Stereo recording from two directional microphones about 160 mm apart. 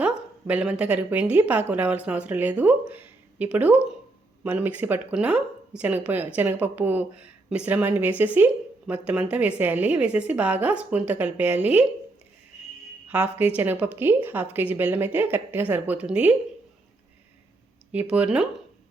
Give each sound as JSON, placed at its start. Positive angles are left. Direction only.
{"t": 0.0, "sound": "a woman's voice", "side_deg": -10}
{"t": 13.1, "sound": "speech", "side_deg": -10}
{"t": 17.9, "sound": "speech", "side_deg": -5}